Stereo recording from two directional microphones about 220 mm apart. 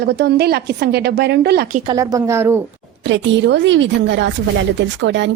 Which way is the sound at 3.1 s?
55° right (ahead or behind).